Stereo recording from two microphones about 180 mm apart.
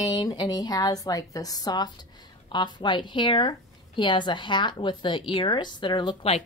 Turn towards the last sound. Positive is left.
turn(degrees=30)  # may be behind; listen again after turning